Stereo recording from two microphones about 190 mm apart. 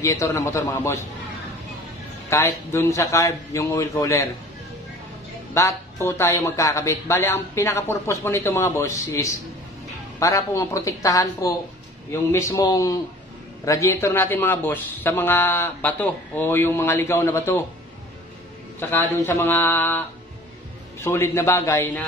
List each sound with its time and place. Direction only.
0.0 s a man's voice: 15° left (ahead or behind)
2.2 s a man's voice: 15° left (ahead or behind)
5.5 s a man's voice: 15° left (ahead or behind)
18.8 s a man's voice: 10° left (ahead or behind)
21.0 s a man's voice: 15° left (ahead or behind)